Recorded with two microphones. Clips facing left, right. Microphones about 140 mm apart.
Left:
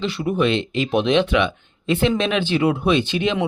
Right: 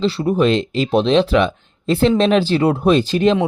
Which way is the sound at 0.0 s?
35° right (ahead or behind).